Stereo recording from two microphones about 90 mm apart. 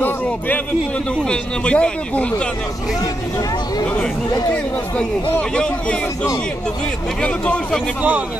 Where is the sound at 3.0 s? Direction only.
45° left (ahead or behind).